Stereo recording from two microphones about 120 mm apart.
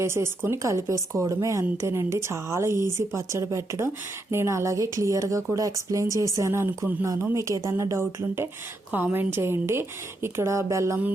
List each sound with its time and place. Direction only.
0.0 s speech: 20° right (ahead or behind)